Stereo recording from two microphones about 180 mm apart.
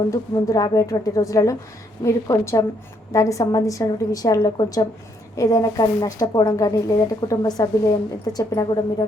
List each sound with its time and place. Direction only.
0.1 s a woman's voice: 20° left (ahead or behind)